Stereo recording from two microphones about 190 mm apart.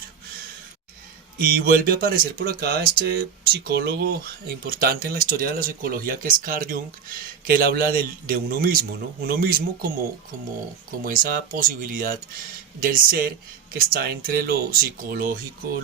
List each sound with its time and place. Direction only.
1.4 s speech: 50° right (ahead or behind)
11.0 s speech: 45° right (ahead or behind)